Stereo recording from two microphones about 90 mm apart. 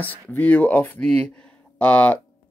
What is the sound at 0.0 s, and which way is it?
Speech, 20° left (ahead or behind).